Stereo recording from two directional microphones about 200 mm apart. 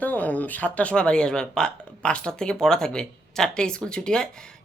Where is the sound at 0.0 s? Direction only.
10° left (ahead or behind).